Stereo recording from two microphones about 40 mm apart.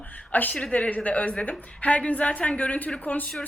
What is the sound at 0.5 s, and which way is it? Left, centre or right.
Speech, left.